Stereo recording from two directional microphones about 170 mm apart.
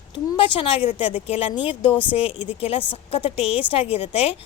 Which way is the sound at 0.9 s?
35° left (ahead or behind).